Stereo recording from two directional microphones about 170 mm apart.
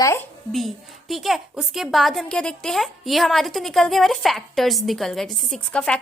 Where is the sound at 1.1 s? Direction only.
Centre (ahead or behind).